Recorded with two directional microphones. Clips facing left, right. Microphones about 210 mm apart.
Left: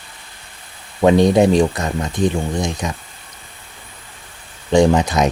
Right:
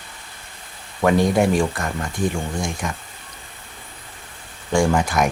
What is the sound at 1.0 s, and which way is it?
Speech, 20° left (ahead or behind).